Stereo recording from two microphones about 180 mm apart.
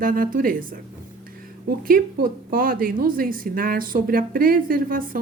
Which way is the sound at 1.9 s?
50° right (ahead or behind).